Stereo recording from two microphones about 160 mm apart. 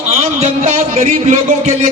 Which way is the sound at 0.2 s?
40° right (ahead or behind).